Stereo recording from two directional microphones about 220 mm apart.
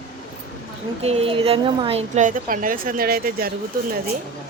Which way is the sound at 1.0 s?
30° right (ahead or behind).